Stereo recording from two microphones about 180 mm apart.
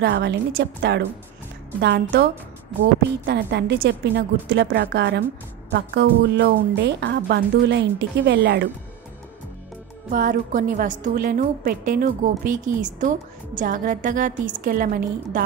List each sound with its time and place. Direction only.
0.0 s speech: 70° right (ahead or behind)
3.3 s speech: 70° right (ahead or behind)
10.0 s a woman's voice: 45° right (ahead or behind)